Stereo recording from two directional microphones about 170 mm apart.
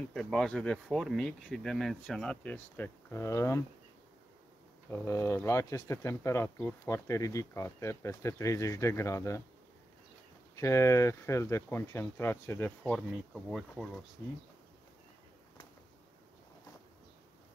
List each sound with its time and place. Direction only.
0.1 s speech: centre (ahead or behind)
4.9 s speech: 15° left (ahead or behind)
10.5 s speech: 15° left (ahead or behind); by 13.8 s centre (ahead or behind)